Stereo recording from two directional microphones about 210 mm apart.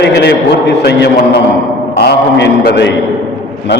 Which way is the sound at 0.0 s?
50° left (ahead or behind).